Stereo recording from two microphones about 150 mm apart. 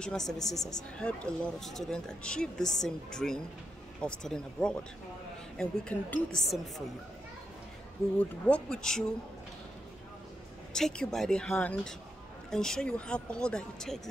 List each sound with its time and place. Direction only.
0.0 s speech: 5° left (ahead or behind)
0.6 s speech: 25° left (ahead or behind)
0.9 s speech: 5° left (ahead or behind)
8.2 s speech: 10° left (ahead or behind)
10.7 s speech: 5° left (ahead or behind)